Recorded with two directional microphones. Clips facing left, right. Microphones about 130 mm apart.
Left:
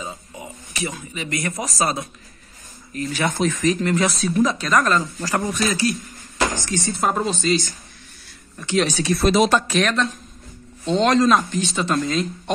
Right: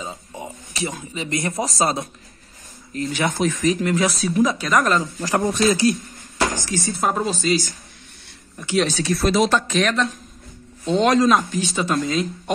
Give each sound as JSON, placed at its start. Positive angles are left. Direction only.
{"t": 0.0, "sound": "a sound", "side_deg": -30}
{"t": 1.1, "sound": "speech", "side_deg": -25}
{"t": 3.3, "sound": "speech", "side_deg": -10}
{"t": 4.7, "sound": "speech", "side_deg": -20}
{"t": 6.9, "sound": "speech", "side_deg": 0}
{"t": 9.0, "sound": "speech", "side_deg": 20}
{"t": 9.7, "sound": "speech", "side_deg": 0}